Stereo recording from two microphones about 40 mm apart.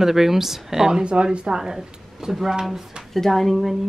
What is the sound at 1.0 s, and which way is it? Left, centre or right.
A woman's voice, right.